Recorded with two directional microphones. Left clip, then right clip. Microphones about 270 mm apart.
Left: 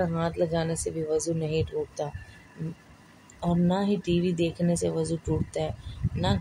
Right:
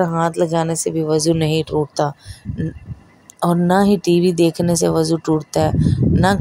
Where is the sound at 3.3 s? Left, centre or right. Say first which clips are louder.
Right 12 dB; right.